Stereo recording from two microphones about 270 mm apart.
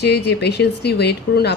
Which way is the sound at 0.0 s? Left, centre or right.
Left.